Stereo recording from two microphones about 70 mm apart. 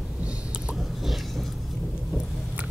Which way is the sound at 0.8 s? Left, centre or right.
Centre.